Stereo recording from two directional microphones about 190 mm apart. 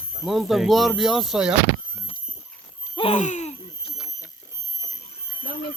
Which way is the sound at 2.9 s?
35° left (ahead or behind).